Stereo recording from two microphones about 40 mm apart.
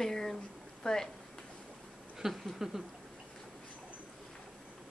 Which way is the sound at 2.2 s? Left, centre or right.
Centre.